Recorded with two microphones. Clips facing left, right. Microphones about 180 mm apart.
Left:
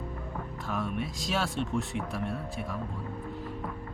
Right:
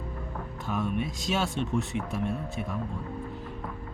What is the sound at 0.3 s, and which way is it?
Speech, centre (ahead or behind).